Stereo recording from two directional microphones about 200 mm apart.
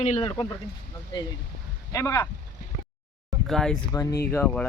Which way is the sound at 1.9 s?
15° left (ahead or behind).